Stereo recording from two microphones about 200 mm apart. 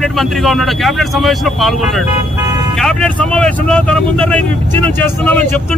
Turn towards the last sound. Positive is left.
turn(degrees=5)  # may be behind; listen again after turning